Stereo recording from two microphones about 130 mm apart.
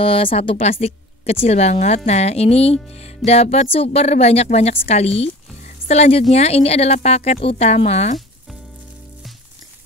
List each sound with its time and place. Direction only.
0.0 s speech: 45° left (ahead or behind)
3.3 s music: 55° left (ahead or behind)
3.7 s speech: 50° left (ahead or behind)
5.2 s music: 55° left (ahead or behind)
6.3 s speech: 55° left (ahead or behind)